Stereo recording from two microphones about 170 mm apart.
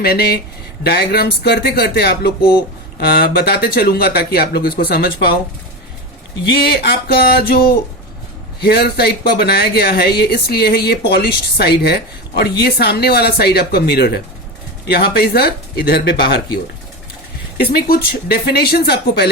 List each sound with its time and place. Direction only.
0.0 s speech: 65° left (ahead or behind)
6.4 s speech: 70° left (ahead or behind)
17.6 s speech: 65° left (ahead or behind)